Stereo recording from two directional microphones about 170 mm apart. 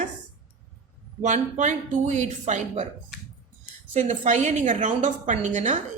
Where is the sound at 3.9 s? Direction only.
45° right (ahead or behind).